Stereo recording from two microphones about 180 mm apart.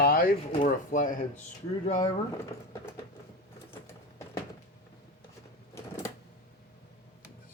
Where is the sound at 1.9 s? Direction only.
25° left (ahead or behind).